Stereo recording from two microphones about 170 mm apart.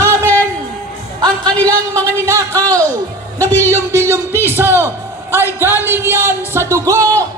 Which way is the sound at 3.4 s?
10° left (ahead or behind).